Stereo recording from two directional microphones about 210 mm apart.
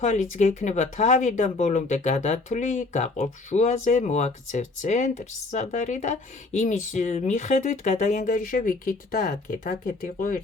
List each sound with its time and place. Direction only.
0.0 s speech: 35° left (ahead or behind)